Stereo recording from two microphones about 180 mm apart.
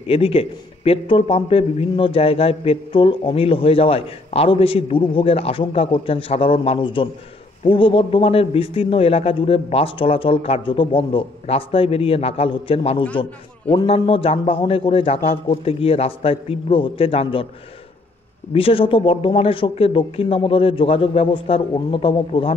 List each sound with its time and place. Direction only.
0.0 s speech: 30° left (ahead or behind)
18.5 s speech: 30° left (ahead or behind)